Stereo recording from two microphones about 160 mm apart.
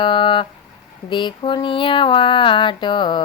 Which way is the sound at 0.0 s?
30° left (ahead or behind).